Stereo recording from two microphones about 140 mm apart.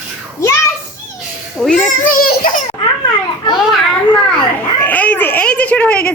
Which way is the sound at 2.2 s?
90° left.